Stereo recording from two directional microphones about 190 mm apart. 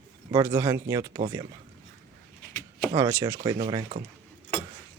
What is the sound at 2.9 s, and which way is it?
Speech, 15° right (ahead or behind).